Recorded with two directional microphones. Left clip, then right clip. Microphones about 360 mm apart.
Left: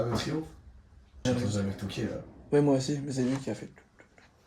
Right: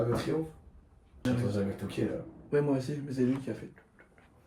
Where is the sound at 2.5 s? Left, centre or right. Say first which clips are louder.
Left 4 dB; left.